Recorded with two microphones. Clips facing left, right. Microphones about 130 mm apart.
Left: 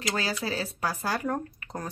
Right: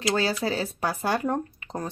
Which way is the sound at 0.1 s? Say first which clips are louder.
Right 5 dB; 30° right (ahead or behind).